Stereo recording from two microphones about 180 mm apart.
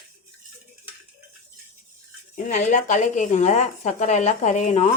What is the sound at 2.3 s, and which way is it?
Speech, 40° left (ahead or behind).